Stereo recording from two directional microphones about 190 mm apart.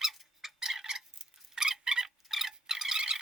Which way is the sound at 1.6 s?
5° right (ahead or behind).